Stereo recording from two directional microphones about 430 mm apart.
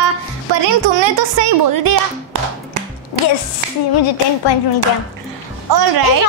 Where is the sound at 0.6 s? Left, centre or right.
Right.